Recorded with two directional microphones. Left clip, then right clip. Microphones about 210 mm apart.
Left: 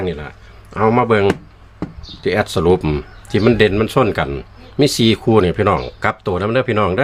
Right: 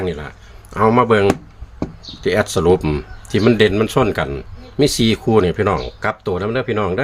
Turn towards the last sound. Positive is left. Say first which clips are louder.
# left 3 dB
turn(degrees=20)  # may be behind; listen again after turning